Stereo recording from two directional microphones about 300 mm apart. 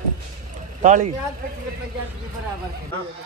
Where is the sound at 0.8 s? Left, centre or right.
Right.